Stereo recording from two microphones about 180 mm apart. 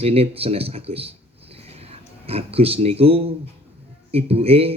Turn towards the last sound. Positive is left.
turn(degrees=-35)  # may be behind; listen again after turning